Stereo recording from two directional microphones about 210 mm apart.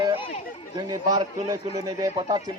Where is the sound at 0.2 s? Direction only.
30° left (ahead or behind).